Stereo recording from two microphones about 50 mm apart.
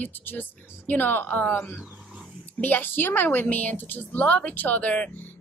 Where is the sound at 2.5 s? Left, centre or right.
Left.